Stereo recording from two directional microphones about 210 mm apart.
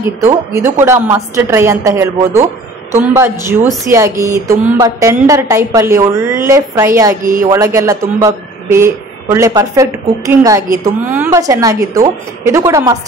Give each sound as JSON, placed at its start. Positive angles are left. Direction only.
{"t": 0.0, "sound": "speech", "side_deg": -10}
{"t": 7.2, "sound": "speech", "side_deg": -40}
{"t": 7.5, "sound": "speech", "side_deg": -15}